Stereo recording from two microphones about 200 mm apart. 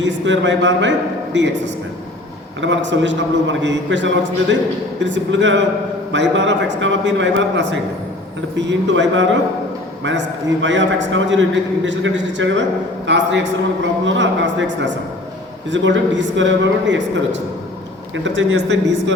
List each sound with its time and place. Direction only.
0.0 s a man's voice: 65° right (ahead or behind)